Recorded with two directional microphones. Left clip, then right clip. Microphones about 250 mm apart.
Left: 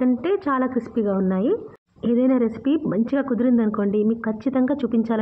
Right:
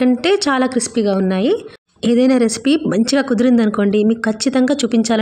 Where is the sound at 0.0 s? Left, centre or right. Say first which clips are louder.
Right 7 dB; right.